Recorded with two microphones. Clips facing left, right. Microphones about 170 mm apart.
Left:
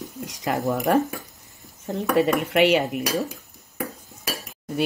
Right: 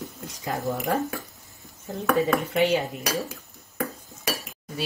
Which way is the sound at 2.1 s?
75° left (ahead or behind).